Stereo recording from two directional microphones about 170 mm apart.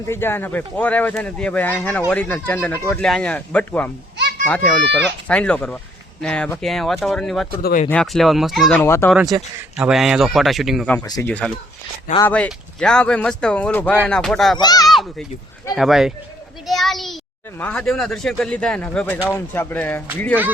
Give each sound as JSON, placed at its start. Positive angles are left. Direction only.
{"t": 0.1, "sound": "speech", "side_deg": 15}
{"t": 7.6, "sound": "speech", "side_deg": 55}
{"t": 7.9, "sound": "speech", "side_deg": 5}
{"t": 8.8, "sound": "speech", "side_deg": 15}
{"t": 9.1, "sound": "speech", "side_deg": 0}
{"t": 11.0, "sound": "speech", "side_deg": 20}
{"t": 11.3, "sound": "speech", "side_deg": 10}
{"t": 14.6, "sound": "speech", "side_deg": 25}
{"t": 15.7, "sound": "speech", "side_deg": 0}
{"t": 16.6, "sound": "child singing", "side_deg": 0}
{"t": 17.6, "sound": "speech", "side_deg": 5}